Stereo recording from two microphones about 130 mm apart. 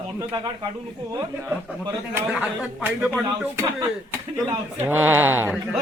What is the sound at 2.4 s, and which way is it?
Speech, 15° right (ahead or behind).